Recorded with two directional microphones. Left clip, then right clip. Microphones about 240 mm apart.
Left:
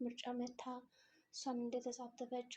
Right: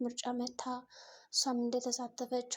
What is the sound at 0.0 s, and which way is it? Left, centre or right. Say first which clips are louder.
Speech: right 7 dB; right.